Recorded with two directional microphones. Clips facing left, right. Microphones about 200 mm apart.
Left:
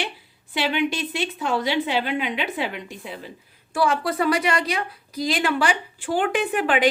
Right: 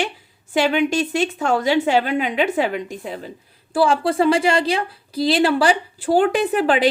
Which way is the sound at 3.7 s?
30° right (ahead or behind).